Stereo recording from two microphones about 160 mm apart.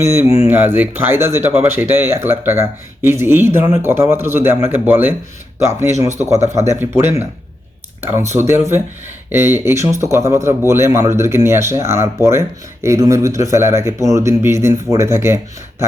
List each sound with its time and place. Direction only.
0.0 s speech: 15° right (ahead or behind)
6.1 s speech: 20° right (ahead or behind)
8.4 s speech: 15° right (ahead or behind)